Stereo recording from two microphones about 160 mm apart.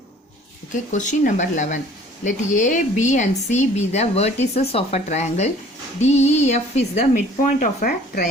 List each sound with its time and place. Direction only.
0.9 s speech: 50° left (ahead or behind)